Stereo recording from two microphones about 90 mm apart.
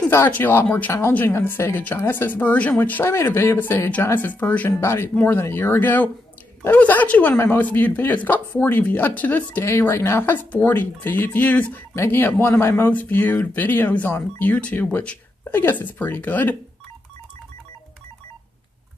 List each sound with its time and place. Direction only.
0.1 s speech: 25° left (ahead or behind)
7.3 s speech: 30° left (ahead or behind)
7.6 s speech: 20° left (ahead or behind)
11.9 s speech: 25° left (ahead or behind)